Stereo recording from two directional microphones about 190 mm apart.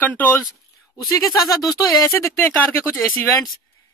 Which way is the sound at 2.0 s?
15° left (ahead or behind).